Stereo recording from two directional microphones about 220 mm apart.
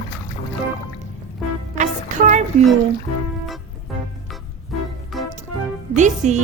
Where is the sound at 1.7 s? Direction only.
35° right (ahead or behind).